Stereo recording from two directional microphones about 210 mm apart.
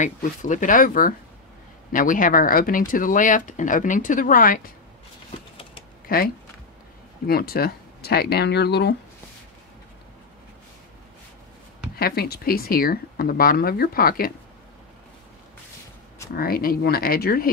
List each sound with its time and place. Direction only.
0.0 s speech: 35° left (ahead or behind)
6.0 s speech: 45° left (ahead or behind)
12.0 s speech: 45° left (ahead or behind)
16.3 s speech: 45° left (ahead or behind)